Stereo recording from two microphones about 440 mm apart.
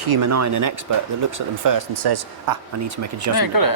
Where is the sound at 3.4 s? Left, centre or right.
Left.